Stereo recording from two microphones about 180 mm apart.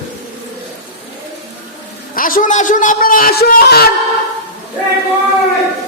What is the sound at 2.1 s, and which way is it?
A man's voice, 50° left (ahead or behind).